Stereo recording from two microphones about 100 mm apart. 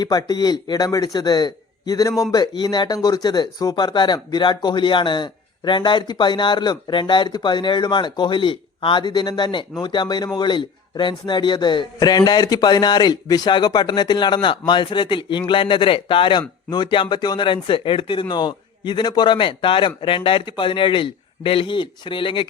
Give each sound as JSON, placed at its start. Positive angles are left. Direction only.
{"t": 0.0, "sound": "a man's voice", "side_deg": 40}
{"t": 16.6, "sound": "a man's voice", "side_deg": 45}